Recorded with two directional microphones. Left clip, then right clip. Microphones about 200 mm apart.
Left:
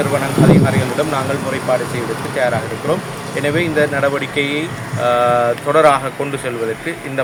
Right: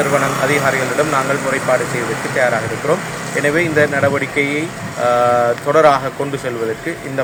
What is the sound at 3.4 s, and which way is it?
Speech, 5° right (ahead or behind).